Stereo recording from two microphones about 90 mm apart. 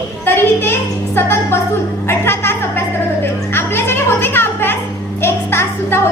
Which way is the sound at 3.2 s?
25° left (ahead or behind).